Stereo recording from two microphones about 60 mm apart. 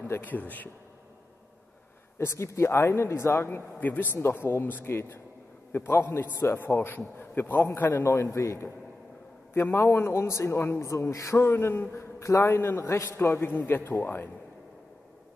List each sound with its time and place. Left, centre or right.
0.0 s speech: left
2.1 s a man's voice: left
3.8 s speech: left
6.5 s a man's voice: left
8.0 s a man's voice: left
9.5 s a man's voice: left
10.9 s a man's voice: left